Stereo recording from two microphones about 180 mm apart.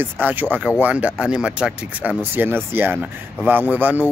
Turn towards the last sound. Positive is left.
turn(degrees=-10)  # may be behind; listen again after turning